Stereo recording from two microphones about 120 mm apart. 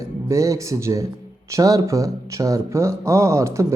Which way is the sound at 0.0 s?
25° right (ahead or behind).